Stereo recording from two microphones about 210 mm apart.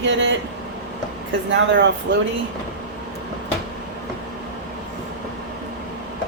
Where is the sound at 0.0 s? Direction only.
60° right (ahead or behind).